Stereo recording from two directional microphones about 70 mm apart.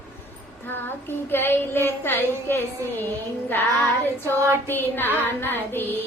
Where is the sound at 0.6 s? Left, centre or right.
Left.